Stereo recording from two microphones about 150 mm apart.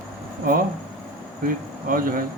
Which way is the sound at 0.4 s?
70° right (ahead or behind).